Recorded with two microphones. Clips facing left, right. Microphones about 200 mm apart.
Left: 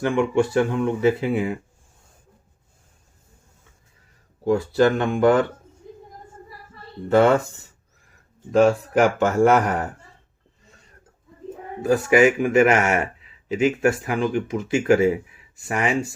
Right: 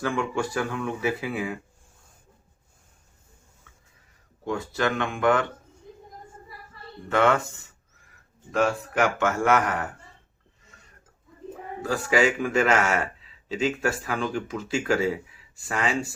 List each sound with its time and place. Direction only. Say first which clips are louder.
0.0 s speech: left 7 dB; 20° left (ahead or behind)
4.4 s a man's voice: left 9 dB; 35° left (ahead or behind)
7.1 s a man's voice: left 6 dB; 35° left (ahead or behind)
11.8 s speech: left 7 dB; 20° left (ahead or behind)